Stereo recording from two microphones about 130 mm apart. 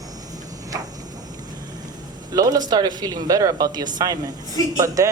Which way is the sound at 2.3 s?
30° right (ahead or behind).